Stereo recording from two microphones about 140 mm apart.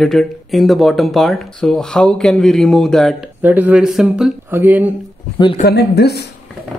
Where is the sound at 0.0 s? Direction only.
Centre (ahead or behind).